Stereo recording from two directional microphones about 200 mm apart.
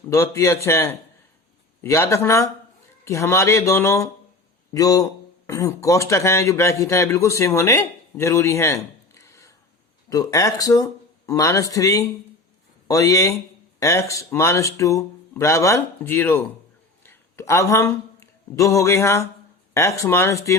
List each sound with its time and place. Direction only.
0.1 s a man's voice: 15° left (ahead or behind)
17.0 s a sound: 10° left (ahead or behind)
19.7 s a man's voice: 15° left (ahead or behind)